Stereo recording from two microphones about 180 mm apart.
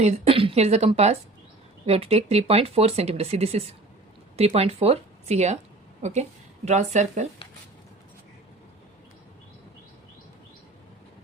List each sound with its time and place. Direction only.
0.0 s a woman's voice: 35° right (ahead or behind)